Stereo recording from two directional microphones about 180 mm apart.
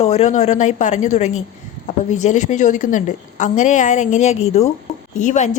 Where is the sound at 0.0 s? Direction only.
35° left (ahead or behind).